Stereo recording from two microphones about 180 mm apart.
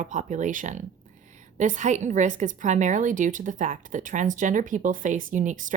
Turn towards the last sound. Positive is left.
turn(degrees=-45)  # may be behind; listen again after turning